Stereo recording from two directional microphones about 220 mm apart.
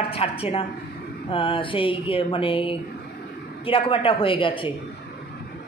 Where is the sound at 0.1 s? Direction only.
25° left (ahead or behind).